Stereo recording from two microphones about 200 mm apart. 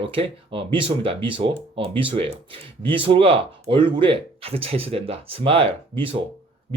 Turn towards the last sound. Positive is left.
turn(degrees=-25)  # may be behind; listen again after turning